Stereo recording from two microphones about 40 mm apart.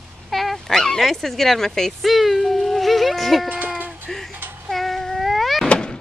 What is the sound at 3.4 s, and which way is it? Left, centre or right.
Sheep, right.